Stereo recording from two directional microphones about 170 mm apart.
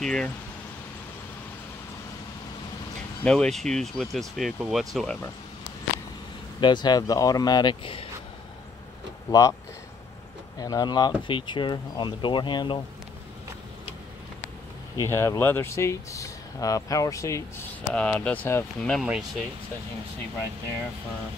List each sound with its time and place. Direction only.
0.0 s speech: 5° left (ahead or behind)
3.3 s speech: 5° left (ahead or behind)
6.6 s speech: 25° left (ahead or behind)
9.3 s speech: 20° left (ahead or behind)
10.6 s speech: 20° left (ahead or behind)
15.0 s speech: 15° left (ahead or behind); by 19.4 s centre (ahead or behind)